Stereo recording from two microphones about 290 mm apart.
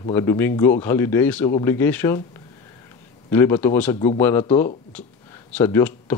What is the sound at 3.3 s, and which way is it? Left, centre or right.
Speech, centre.